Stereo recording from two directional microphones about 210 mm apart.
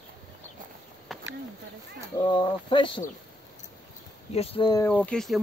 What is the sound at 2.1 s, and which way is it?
Speech, 20° left (ahead or behind).